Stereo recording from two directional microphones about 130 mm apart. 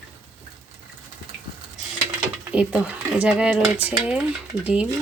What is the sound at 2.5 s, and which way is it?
Speech, 10° right (ahead or behind).